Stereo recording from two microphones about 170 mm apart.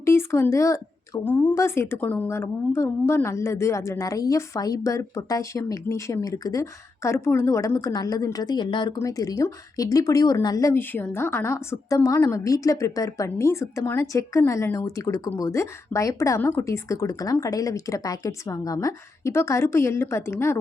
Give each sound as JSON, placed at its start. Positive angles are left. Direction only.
{"t": 0.0, "sound": "speech", "side_deg": 15}